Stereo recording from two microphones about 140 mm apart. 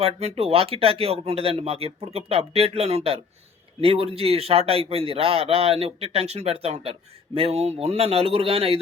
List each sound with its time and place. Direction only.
0.0 s speech: 45° right (ahead or behind)